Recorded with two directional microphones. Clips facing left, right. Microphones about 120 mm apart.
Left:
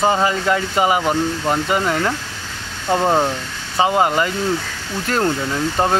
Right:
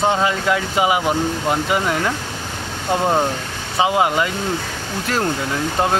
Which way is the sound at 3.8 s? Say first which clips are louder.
Left 1 dB; 5° right (ahead or behind).